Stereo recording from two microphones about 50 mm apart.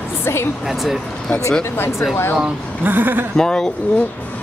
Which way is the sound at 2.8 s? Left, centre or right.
Right.